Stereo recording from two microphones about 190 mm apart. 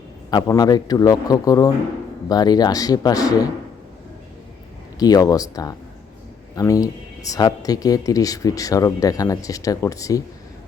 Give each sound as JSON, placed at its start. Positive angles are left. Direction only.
{"t": 0.3, "sound": "a man's voice", "side_deg": 20}
{"t": 4.9, "sound": "a man's voice", "side_deg": 20}